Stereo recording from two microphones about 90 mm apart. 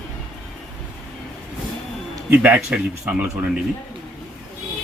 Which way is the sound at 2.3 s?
20° right (ahead or behind).